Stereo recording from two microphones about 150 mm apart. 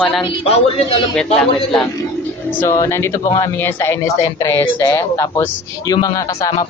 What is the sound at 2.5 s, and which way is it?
A woman's voice, 15° left (ahead or behind).